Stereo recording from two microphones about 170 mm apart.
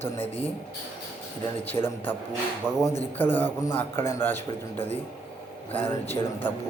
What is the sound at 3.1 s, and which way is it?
A man's voice, 10° left (ahead or behind).